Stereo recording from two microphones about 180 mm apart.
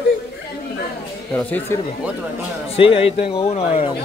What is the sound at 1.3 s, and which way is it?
Speech, 10° left (ahead or behind).